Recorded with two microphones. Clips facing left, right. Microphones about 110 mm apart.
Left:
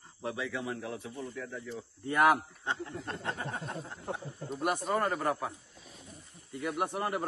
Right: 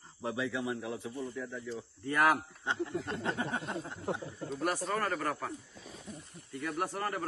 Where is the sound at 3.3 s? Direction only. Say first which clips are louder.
Right 4 dB; 70° right (ahead or behind).